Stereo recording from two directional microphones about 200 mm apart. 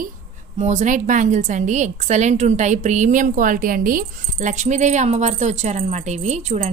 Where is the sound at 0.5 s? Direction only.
35° right (ahead or behind).